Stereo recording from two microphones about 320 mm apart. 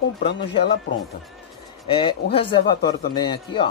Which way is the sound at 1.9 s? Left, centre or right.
Centre.